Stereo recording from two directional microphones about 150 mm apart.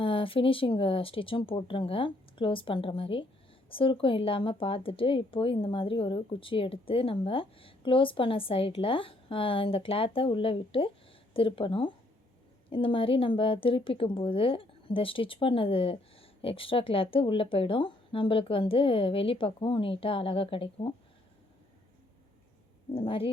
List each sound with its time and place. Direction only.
0.0 s speech: 35° left (ahead or behind)
23.0 s speech: 40° left (ahead or behind)